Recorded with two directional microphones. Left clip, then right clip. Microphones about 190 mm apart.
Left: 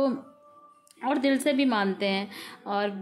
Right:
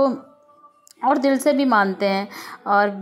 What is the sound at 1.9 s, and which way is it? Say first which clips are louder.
Speech: right 7 dB; 20° right (ahead or behind).